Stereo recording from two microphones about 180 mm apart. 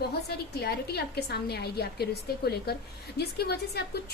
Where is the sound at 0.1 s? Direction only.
60° left (ahead or behind).